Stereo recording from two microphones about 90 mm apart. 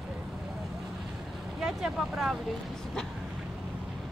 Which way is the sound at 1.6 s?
5° right (ahead or behind).